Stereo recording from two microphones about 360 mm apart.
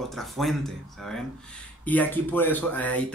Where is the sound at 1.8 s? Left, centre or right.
Centre.